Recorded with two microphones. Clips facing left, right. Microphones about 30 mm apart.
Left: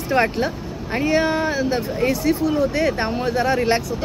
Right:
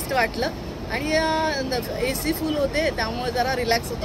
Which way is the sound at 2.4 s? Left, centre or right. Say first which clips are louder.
Left 2 dB; right.